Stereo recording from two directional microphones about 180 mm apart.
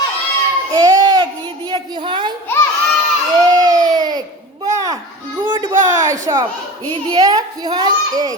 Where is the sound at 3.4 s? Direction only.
20° right (ahead or behind).